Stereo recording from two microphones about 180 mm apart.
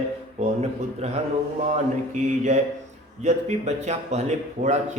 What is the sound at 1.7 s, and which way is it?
Speech, 40° right (ahead or behind).